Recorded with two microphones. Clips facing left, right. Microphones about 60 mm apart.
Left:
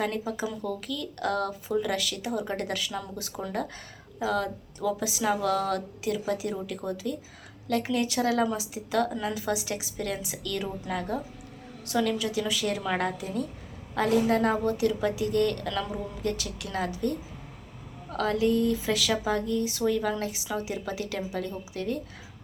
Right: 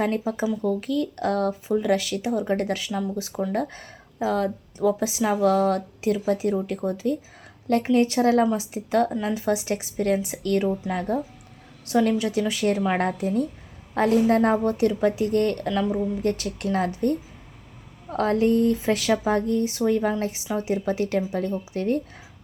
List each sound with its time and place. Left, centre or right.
0.0 s a woman's voice: right
3.3 s a woman's voice: centre
4.2 s a woman's voice: right
9.0 s a woman's voice: centre
9.3 s speech: right
10.7 s a woman's voice: right
15.7 s a woman's voice: centre
16.2 s speech: right